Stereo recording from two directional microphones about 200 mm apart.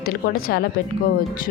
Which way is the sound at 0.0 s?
50° left (ahead or behind).